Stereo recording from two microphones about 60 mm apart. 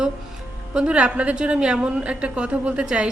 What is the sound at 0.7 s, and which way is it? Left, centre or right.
A woman's voice, centre.